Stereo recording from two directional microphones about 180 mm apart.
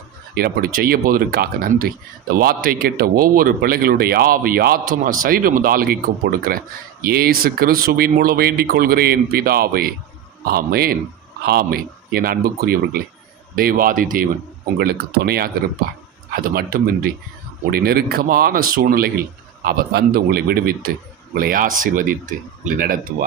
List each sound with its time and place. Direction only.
0.3 s speech: 60° right (ahead or behind)